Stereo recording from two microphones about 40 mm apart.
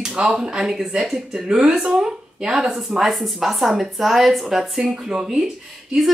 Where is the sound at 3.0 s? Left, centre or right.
Centre.